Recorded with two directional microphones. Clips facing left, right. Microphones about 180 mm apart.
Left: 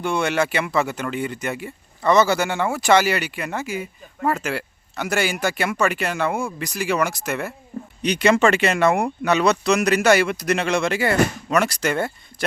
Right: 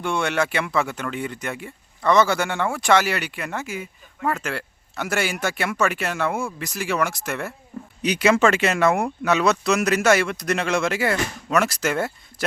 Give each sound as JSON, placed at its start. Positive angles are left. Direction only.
{"t": 0.0, "sound": "speech", "side_deg": 0}